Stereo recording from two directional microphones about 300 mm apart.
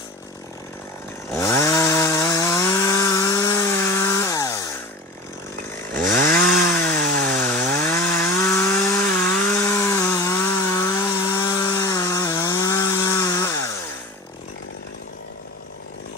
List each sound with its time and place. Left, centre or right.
1.3 s chainsaw: centre
6.0 s chainsaw: right
6.7 s chainsaw: centre
7.1 s chainsaw: right
7.4 s chainsaw: centre